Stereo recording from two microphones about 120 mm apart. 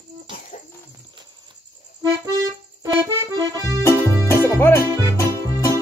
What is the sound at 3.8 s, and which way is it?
Music, 20° left (ahead or behind).